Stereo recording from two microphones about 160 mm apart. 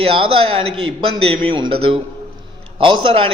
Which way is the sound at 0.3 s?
30° right (ahead or behind).